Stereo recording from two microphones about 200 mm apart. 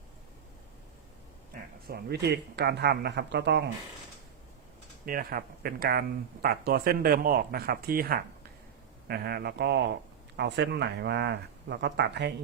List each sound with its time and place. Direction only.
1.9 s speech: 55° right (ahead or behind)
5.0 s speech: 45° right (ahead or behind)